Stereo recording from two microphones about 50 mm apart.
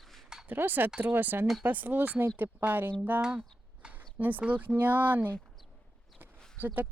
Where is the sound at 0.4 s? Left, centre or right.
Right.